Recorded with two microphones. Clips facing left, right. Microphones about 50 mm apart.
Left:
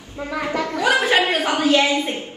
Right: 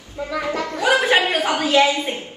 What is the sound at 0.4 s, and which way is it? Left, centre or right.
Speech, left.